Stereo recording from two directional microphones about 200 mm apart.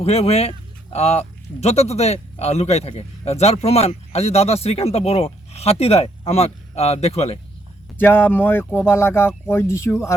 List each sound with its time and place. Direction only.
0.0 s speech: 30° left (ahead or behind)
7.9 s speech: 10° left (ahead or behind)